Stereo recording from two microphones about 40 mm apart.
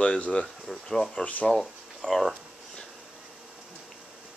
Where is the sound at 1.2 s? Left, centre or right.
Left.